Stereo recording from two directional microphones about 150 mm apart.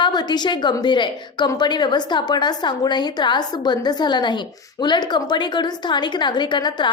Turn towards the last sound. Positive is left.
turn(degrees=30)  # may be behind; listen again after turning